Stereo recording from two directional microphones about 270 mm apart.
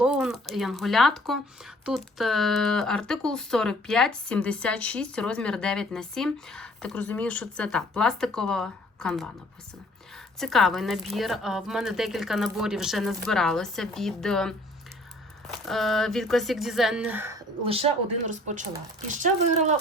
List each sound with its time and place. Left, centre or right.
0.0 s speech: centre
10.4 s speech: centre; by 19.8 s right